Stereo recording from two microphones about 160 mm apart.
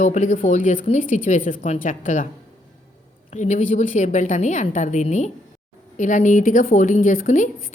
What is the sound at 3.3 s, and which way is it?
A woman's voice, 45° left (ahead or behind).